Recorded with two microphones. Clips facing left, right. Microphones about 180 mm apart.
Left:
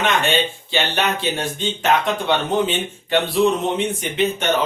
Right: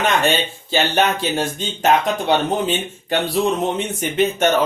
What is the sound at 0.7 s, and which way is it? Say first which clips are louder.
Speech: right 5 dB; 45° right (ahead or behind).